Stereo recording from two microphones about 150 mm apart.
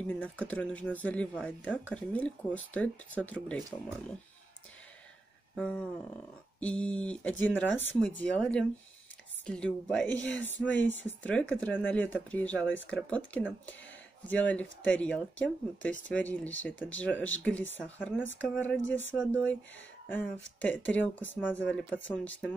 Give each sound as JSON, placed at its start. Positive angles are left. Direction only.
{"t": 0.0, "sound": "speech", "side_deg": 10}
{"t": 5.6, "sound": "speech", "side_deg": 5}